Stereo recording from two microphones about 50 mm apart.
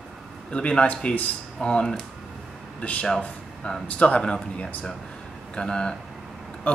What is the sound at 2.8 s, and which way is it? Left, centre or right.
Speech, left.